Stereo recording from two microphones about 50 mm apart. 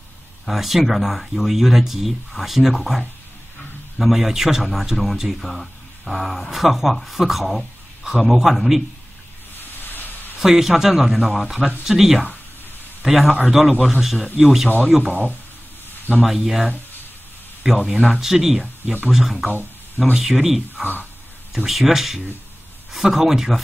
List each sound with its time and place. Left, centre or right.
0.5 s speech: centre
4.0 s speech: centre
9.6 s a sound: left
10.4 s speech: centre
16.2 s speech: centre